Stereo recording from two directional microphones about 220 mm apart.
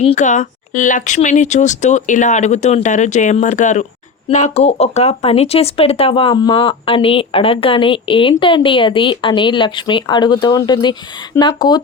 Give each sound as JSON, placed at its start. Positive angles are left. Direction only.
{"t": 0.0, "sound": "speech", "side_deg": 30}